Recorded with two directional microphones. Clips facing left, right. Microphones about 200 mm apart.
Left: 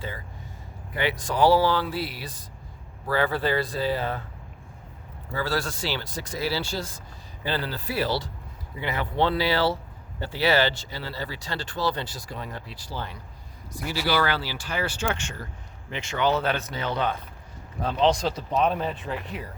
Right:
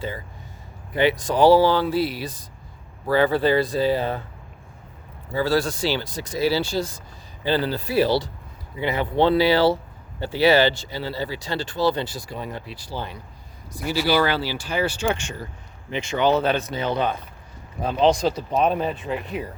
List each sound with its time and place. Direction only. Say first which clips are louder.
1.2 s speech: right 4 dB; 20° right (ahead or behind)
5.3 s speech: right 6 dB; 15° right (ahead or behind)
14.1 s speech: right 4 dB; 25° right (ahead or behind)
14.7 s speech: right 4 dB; 15° right (ahead or behind)